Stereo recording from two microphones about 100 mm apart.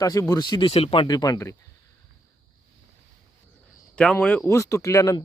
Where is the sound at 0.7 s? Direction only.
70° left (ahead or behind).